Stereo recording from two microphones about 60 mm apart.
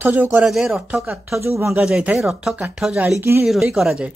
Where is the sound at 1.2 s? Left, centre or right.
Right.